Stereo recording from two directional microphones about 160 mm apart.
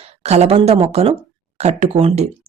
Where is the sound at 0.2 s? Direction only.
40° right (ahead or behind).